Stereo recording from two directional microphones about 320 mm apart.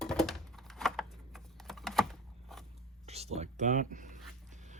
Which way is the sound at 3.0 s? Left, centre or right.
Centre.